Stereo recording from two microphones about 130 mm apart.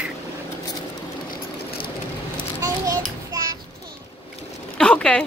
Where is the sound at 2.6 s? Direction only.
25° right (ahead or behind).